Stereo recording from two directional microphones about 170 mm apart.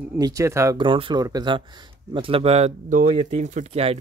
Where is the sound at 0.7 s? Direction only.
30° right (ahead or behind).